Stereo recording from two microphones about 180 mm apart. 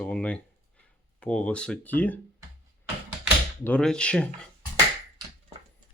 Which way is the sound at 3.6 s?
5° left (ahead or behind).